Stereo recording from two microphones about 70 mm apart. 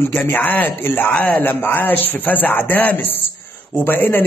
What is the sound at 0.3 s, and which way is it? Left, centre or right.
Speech, left.